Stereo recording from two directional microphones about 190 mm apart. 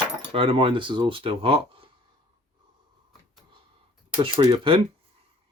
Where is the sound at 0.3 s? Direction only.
30° right (ahead or behind).